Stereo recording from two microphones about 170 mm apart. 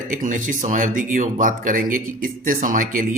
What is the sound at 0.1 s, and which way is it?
A man's voice, 50° right (ahead or behind).